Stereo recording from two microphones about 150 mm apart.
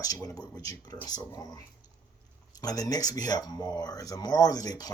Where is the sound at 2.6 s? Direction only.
25° left (ahead or behind).